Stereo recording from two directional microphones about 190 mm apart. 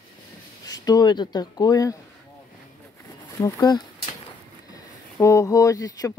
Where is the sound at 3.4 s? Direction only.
20° left (ahead or behind).